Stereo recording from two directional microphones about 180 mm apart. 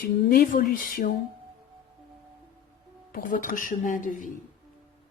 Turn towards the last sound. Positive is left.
turn(degrees=50)  # may be behind; listen again after turning